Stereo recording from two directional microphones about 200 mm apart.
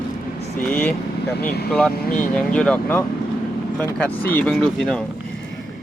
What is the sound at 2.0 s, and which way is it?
Speech, 40° left (ahead or behind).